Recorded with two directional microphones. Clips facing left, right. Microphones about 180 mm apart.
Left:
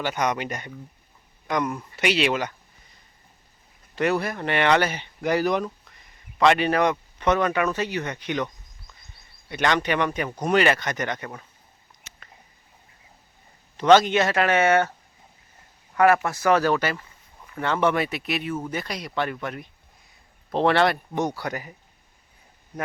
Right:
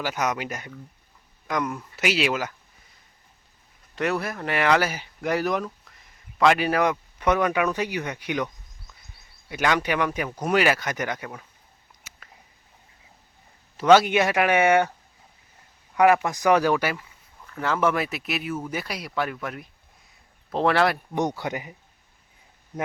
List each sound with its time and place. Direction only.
0.0 s speech: 5° right (ahead or behind)
3.9 s speech: centre (ahead or behind)
13.7 s speech: 10° right (ahead or behind)
16.0 s speech: 15° right (ahead or behind)
21.2 s speech: 20° right (ahead or behind)